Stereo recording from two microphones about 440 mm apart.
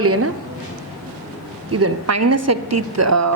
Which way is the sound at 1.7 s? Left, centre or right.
Right.